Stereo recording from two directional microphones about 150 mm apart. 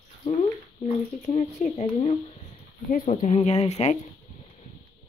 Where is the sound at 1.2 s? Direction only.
45° left (ahead or behind).